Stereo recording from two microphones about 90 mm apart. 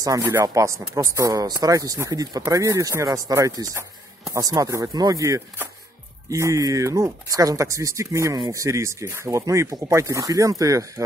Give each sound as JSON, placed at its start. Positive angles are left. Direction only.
{"t": 0.3, "sound": "speech", "side_deg": -30}